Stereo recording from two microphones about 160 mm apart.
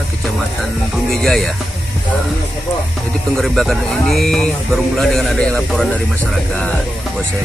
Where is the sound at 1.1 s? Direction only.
Centre (ahead or behind).